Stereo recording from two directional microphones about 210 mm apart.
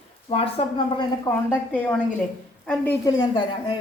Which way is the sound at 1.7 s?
5° left (ahead or behind).